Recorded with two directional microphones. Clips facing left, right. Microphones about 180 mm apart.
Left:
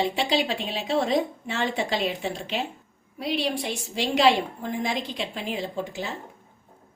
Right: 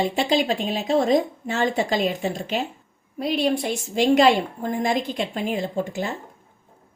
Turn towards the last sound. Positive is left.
turn(degrees=-50)  # may be behind; listen again after turning